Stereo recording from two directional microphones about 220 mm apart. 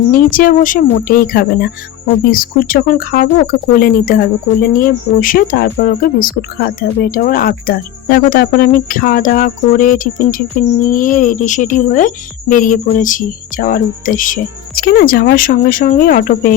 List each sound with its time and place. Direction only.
0.1 s speech: 40° left (ahead or behind)